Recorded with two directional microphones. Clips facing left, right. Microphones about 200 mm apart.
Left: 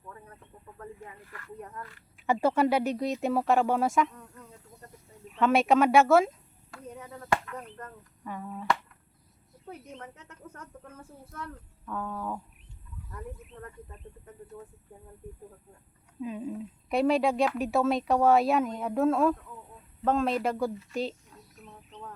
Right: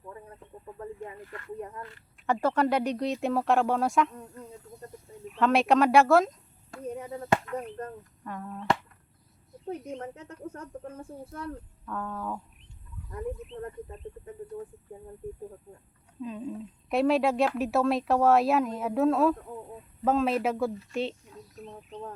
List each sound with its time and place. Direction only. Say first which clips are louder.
0.8 s speech: right 5 dB; 25° right (ahead or behind)
2.2 s speech: left 1 dB; 10° left (ahead or behind)
5.3 s speech: even; centre (ahead or behind)
6.7 s a sound: right 7 dB; 25° right (ahead or behind)
8.2 s speech: left 1 dB; 5° left (ahead or behind)
9.9 s speech: right 7 dB; 35° right (ahead or behind)
11.9 s speech: even; 5° left (ahead or behind)
13.1 s speech: right 8 dB; 20° right (ahead or behind)
16.2 s speech: left 1 dB; 10° left (ahead or behind)
21.6 s speech: right 6 dB; 30° right (ahead or behind)